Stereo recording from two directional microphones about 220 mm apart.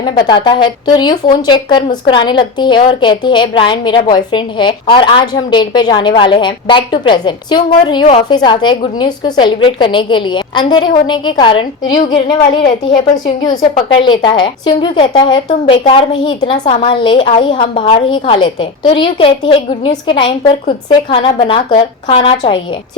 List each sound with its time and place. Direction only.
0.3 s speech: 20° left (ahead or behind)